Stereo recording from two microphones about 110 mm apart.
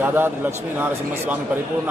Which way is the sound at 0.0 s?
20° right (ahead or behind).